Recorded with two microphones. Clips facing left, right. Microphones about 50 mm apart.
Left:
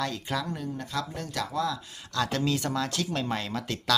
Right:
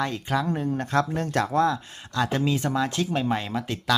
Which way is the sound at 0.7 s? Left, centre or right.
Right.